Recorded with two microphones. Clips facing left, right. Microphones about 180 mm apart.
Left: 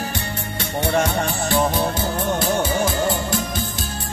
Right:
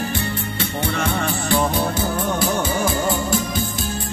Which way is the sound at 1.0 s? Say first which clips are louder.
Left 1 dB; 55° right (ahead or behind).